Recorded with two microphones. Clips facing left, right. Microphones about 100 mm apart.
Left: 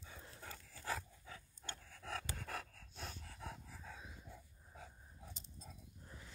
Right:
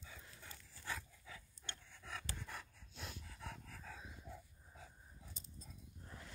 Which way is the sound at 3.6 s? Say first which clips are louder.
Even; 5° left (ahead or behind).